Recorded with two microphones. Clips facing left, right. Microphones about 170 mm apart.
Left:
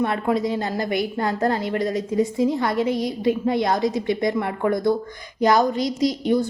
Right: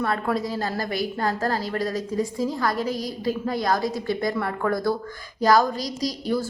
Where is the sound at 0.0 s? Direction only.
20° left (ahead or behind).